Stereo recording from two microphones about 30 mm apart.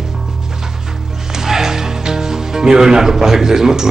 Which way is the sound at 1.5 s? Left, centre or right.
Centre.